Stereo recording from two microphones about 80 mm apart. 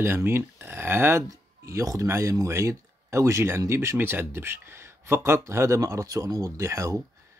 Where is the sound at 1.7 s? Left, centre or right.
Right.